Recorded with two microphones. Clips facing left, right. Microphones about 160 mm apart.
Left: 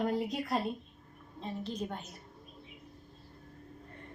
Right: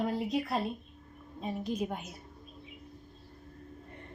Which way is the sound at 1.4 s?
10° right (ahead or behind).